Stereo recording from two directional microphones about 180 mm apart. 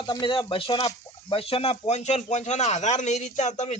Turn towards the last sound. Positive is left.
turn(degrees=40)  # may be behind; listen again after turning